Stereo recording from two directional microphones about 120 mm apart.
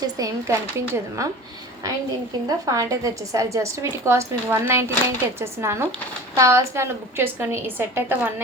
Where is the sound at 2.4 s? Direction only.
30° right (ahead or behind).